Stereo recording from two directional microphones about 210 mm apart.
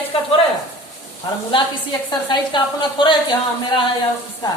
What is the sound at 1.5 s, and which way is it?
A woman's voice, 20° left (ahead or behind).